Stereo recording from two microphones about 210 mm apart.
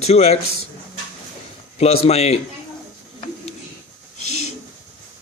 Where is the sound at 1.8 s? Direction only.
30° left (ahead or behind).